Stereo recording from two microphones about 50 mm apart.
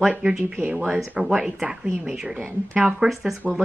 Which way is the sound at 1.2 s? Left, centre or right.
Centre.